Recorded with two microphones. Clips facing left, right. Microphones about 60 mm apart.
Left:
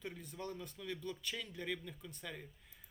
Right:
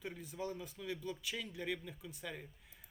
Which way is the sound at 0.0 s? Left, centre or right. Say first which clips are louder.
Right 2 dB; centre.